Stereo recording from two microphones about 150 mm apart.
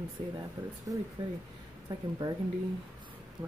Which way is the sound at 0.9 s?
25° right (ahead or behind).